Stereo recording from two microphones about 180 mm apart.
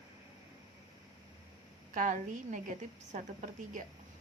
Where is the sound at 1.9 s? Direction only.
45° right (ahead or behind).